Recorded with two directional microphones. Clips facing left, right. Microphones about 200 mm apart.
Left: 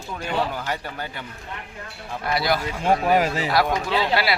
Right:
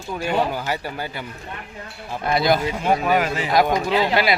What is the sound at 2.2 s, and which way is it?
Speech, 20° right (ahead or behind).